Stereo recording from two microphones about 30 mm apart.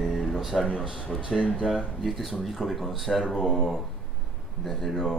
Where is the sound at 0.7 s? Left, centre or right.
Right.